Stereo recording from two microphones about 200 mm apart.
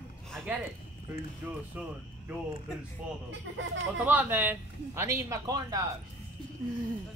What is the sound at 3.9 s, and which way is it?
A man's voice, 10° right (ahead or behind).